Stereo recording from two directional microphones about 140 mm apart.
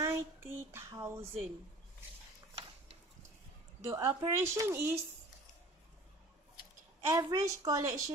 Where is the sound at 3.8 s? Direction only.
20° right (ahead or behind).